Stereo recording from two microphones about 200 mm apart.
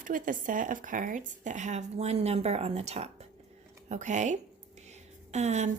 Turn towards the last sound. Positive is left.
turn(degrees=-35)  # may be behind; listen again after turning